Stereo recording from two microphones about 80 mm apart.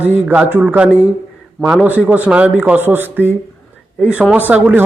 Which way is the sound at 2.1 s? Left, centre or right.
Centre.